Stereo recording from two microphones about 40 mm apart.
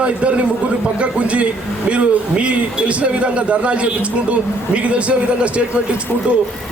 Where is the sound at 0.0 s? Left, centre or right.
Right.